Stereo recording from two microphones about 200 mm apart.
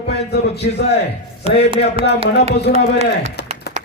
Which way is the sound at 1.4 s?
30° right (ahead or behind).